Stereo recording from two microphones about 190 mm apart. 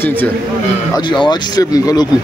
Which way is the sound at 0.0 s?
10° left (ahead or behind).